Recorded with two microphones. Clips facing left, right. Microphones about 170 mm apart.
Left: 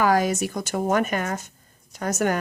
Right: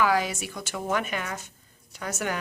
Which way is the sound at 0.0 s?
45° left (ahead or behind).